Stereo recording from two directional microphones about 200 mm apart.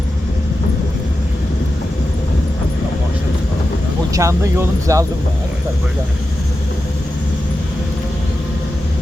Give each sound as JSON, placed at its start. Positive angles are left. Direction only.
{"t": 4.1, "sound": "speech", "side_deg": -15}